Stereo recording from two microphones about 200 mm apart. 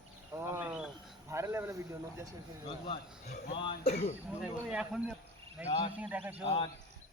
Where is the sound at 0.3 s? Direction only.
10° right (ahead or behind).